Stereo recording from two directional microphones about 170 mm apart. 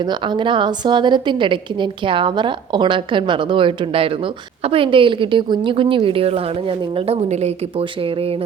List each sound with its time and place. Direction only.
0.0 s a woman's voice: 25° right (ahead or behind)